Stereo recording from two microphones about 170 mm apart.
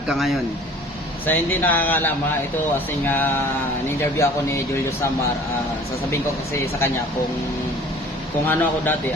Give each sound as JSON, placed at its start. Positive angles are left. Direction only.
{"t": 0.1, "sound": "speech", "side_deg": 0}
{"t": 1.3, "sound": "speech", "side_deg": 10}
{"t": 6.1, "sound": "speech", "side_deg": 15}
{"t": 8.4, "sound": "speech", "side_deg": 10}